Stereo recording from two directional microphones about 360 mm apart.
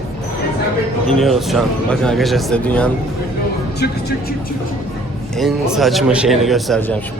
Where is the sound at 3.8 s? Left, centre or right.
Left.